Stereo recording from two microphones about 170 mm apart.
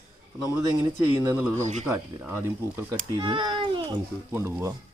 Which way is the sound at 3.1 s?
30° right (ahead or behind).